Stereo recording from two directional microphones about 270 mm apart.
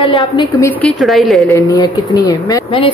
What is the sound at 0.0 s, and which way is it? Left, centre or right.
A woman's voice, centre.